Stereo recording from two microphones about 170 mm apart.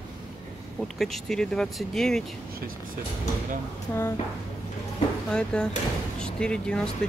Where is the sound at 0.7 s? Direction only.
Centre (ahead or behind).